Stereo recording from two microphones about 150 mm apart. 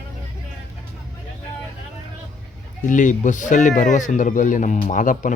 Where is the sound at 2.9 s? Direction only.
60° left (ahead or behind).